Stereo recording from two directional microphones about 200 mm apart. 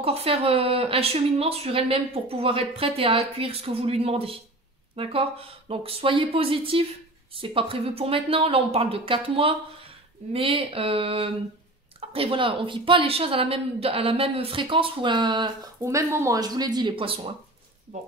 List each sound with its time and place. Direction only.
0.0 s speech: 30° right (ahead or behind)